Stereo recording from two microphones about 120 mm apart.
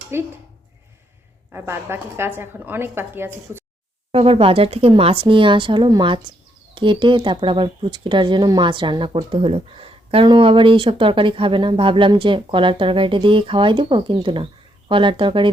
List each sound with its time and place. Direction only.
0.1 s a woman's voice: 20° right (ahead or behind)
1.5 s a woman's voice: 20° right (ahead or behind)
4.1 s speech: 50° right (ahead or behind)